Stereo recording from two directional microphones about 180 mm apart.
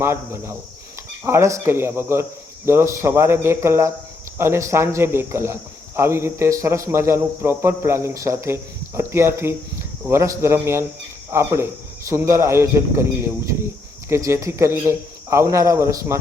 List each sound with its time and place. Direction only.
0.0 s speech: 15° right (ahead or behind)